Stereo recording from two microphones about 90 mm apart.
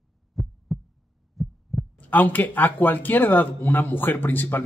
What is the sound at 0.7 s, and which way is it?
Pulse, centre (ahead or behind).